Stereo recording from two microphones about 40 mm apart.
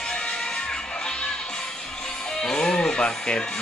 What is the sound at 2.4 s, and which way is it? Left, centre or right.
Music, centre.